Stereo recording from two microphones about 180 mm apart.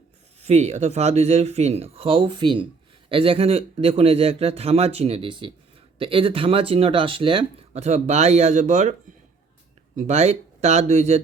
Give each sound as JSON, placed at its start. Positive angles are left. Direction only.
{"t": 0.4, "sound": "speech", "side_deg": -35}